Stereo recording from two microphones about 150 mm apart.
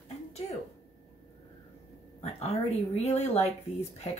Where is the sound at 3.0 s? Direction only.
45° left (ahead or behind).